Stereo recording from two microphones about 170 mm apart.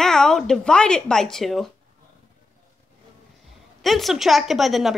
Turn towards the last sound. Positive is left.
turn(degrees=0)  # may be behind; listen again after turning